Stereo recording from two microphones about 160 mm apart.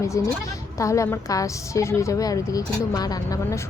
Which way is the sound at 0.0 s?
20° left (ahead or behind).